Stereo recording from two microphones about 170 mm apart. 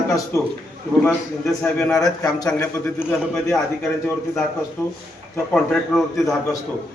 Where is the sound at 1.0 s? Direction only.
5° left (ahead or behind).